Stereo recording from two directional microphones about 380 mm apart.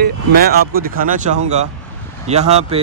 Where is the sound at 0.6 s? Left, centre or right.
Right.